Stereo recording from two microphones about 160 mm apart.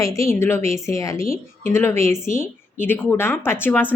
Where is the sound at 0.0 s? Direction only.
20° left (ahead or behind).